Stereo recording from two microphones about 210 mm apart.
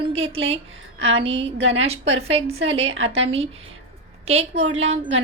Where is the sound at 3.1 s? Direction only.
30° right (ahead or behind).